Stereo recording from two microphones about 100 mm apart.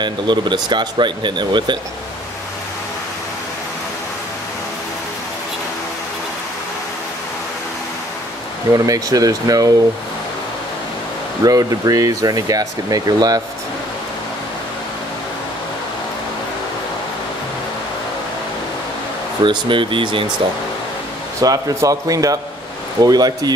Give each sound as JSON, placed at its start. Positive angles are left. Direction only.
{"t": 0.0, "sound": "speech", "side_deg": -50}
{"t": 8.7, "sound": "speech", "side_deg": -35}
{"t": 11.4, "sound": "speech", "side_deg": -35}
{"t": 19.4, "sound": "speech", "side_deg": -55}
{"t": 21.4, "sound": "speech", "side_deg": -35}